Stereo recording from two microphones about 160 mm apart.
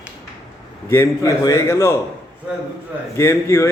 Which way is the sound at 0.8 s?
15° left (ahead or behind).